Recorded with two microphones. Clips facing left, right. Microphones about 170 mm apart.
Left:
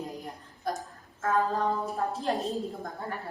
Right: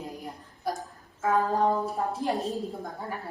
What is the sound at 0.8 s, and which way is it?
A woman's voice, 20° right (ahead or behind).